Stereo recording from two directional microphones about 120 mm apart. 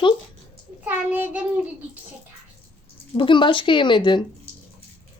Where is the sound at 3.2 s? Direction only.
45° left (ahead or behind).